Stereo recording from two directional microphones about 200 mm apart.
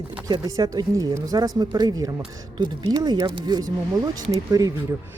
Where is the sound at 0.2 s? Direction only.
20° right (ahead or behind).